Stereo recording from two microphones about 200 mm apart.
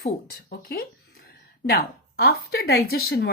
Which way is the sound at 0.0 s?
50° left (ahead or behind).